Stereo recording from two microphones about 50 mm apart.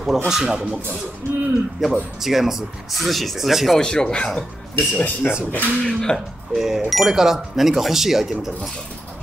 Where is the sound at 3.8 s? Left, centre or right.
Centre.